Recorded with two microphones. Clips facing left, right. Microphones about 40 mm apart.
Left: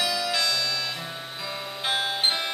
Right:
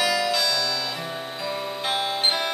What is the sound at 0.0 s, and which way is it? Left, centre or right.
Music, centre.